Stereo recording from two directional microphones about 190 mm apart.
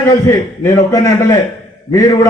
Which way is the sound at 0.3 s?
15° left (ahead or behind).